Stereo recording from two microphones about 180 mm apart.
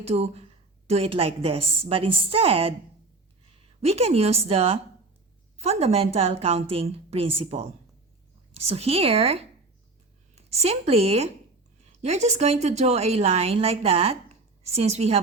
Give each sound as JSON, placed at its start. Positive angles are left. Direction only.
{"t": 0.0, "sound": "a woman's voice", "side_deg": -35}